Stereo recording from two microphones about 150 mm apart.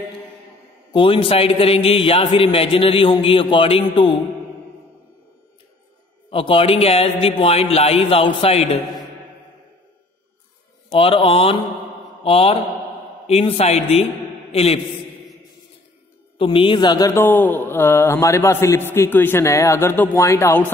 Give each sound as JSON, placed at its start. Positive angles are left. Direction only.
{"t": 0.9, "sound": "a man's voice", "side_deg": 35}
{"t": 6.3, "sound": "a man's voice", "side_deg": 35}
{"t": 10.9, "sound": "a man's voice", "side_deg": 35}
{"t": 16.3, "sound": "a woman's voice", "side_deg": 35}